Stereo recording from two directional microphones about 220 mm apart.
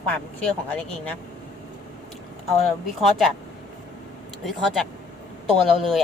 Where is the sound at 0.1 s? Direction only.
5° left (ahead or behind).